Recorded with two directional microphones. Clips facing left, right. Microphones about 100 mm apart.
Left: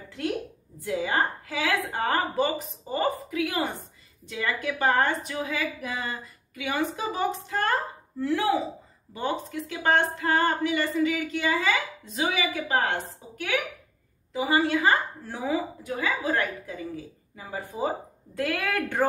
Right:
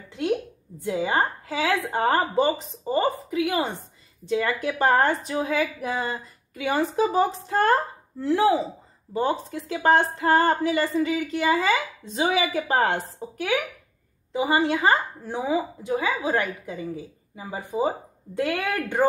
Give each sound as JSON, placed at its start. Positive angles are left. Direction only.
{"t": 0.8, "sound": "a woman's voice", "side_deg": -25}
{"t": 4.3, "sound": "a woman's voice", "side_deg": -35}
{"t": 14.3, "sound": "a woman's voice", "side_deg": -20}